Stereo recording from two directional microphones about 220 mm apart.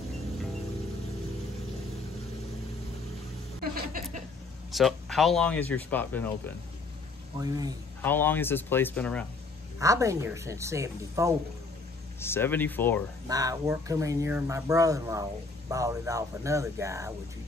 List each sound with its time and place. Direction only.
3.7 s a sound: 35° right (ahead or behind)
4.7 s speech: centre (ahead or behind)
7.3 s speech: 15° right (ahead or behind)
8.0 s speech: 10° left (ahead or behind)
9.8 s speech: 15° right (ahead or behind)
12.2 s speech: 10° left (ahead or behind)
13.3 s speech: 15° right (ahead or behind)